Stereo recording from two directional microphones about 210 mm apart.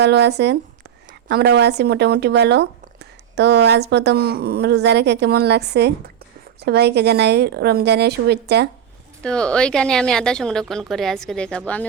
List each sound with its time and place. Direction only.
0.0 s speech: 55° right (ahead or behind)
9.2 s a woman's voice: 5° left (ahead or behind)